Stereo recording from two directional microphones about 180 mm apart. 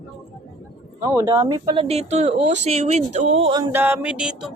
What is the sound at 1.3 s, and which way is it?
Speech, 25° right (ahead or behind).